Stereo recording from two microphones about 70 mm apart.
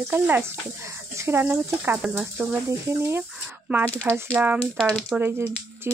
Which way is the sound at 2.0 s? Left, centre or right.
Centre.